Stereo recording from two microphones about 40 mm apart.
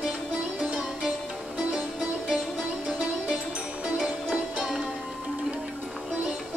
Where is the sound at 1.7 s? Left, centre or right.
Centre.